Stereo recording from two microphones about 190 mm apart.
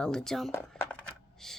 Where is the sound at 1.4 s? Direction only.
Centre (ahead or behind).